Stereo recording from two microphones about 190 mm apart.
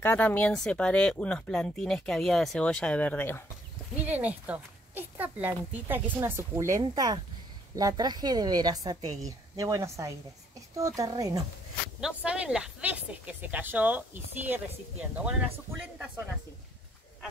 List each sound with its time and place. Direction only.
0.0 s speech: 10° left (ahead or behind)
4.0 s a woman's voice: 10° right (ahead or behind)
12.0 s speech: 5° right (ahead or behind)